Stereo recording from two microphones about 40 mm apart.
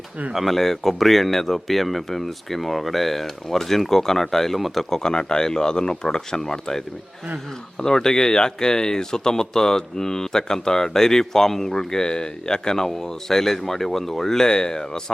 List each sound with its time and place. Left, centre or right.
0.3 s speech: centre